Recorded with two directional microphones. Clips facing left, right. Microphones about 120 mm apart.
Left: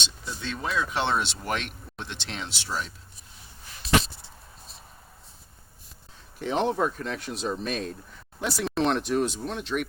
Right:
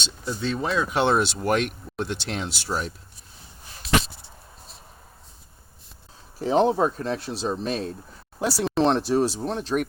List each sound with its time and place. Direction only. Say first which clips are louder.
0.0 s speech: right 7 dB; 40° right (ahead or behind)
6.4 s speech: right 5 dB; 35° right (ahead or behind)